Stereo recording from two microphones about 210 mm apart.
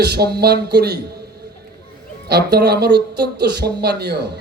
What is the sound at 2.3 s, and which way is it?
A man's voice, 50° right (ahead or behind).